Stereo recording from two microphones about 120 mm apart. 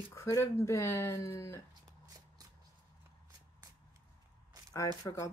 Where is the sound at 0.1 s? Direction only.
25° left (ahead or behind).